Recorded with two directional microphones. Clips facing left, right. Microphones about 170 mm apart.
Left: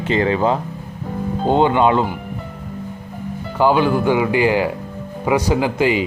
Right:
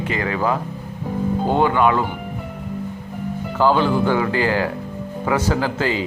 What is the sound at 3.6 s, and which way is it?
A man's voice, 15° left (ahead or behind).